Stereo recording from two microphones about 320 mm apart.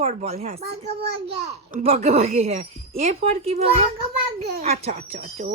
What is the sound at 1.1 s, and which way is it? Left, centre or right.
Speech, right.